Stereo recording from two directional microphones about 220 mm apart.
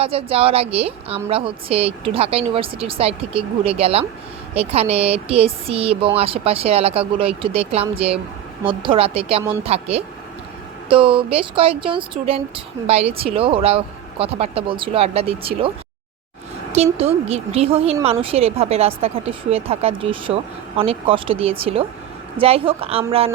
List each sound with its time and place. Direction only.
0.0 s speech: 25° right (ahead or behind)
16.7 s speech: 30° right (ahead or behind)